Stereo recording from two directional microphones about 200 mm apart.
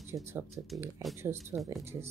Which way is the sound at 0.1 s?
10° right (ahead or behind).